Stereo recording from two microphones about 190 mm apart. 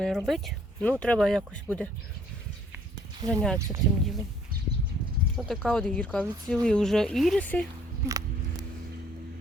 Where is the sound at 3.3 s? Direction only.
5° left (ahead or behind).